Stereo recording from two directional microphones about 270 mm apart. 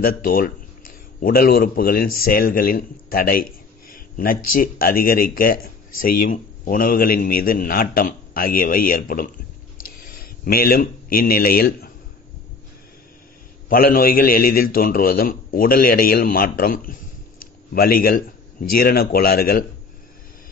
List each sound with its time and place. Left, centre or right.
0.0 s speech: left
9.8 s a sound: left
13.7 s speech: left